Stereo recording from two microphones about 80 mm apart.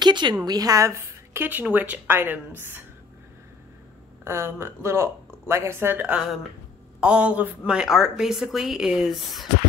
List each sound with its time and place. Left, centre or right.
0.0 s a woman's voice: right
0.5 s a woman's voice: right
4.2 s a woman's voice: right; by 9.5 s centre